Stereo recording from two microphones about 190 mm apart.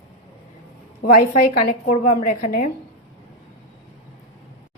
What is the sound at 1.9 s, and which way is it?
Speech, 35° left (ahead or behind).